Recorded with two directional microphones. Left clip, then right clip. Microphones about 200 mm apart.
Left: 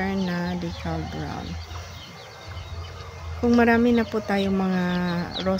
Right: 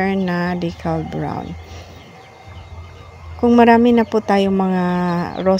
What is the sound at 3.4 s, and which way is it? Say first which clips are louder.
Speech: right 8 dB; 30° right (ahead or behind).